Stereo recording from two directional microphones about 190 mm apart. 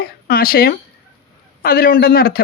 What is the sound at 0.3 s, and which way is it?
A man's voice, 50° left (ahead or behind).